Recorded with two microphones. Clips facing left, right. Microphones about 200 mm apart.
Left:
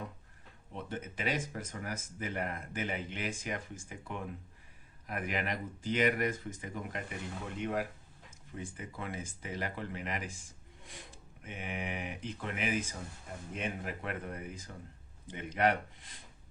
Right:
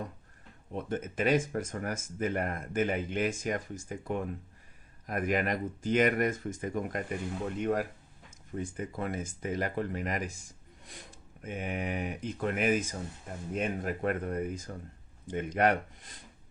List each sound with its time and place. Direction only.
0.7 s speech: 45° right (ahead or behind)
11.4 s speech: 45° right (ahead or behind)